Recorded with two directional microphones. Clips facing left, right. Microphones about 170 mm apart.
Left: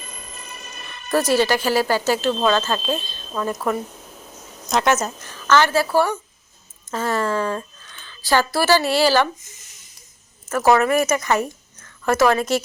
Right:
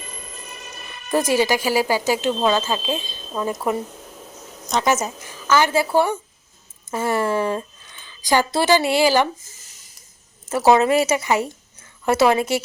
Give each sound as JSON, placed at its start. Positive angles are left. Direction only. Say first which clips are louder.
{"t": 1.1, "sound": "speech", "louder": "left 1 dB", "side_deg": -15}
{"t": 4.9, "sound": "a woman's voice", "louder": "left 1 dB", "side_deg": -10}
{"t": 9.4, "sound": "speech", "louder": "left 1 dB", "side_deg": -30}
{"t": 10.7, "sound": "speech", "louder": "right 1 dB", "side_deg": -20}